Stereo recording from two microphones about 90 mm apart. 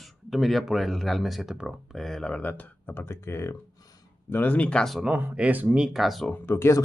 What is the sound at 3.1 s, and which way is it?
Speech, 30° left (ahead or behind).